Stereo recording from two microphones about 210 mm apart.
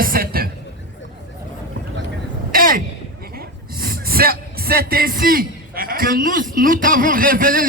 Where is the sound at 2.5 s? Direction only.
45° right (ahead or behind).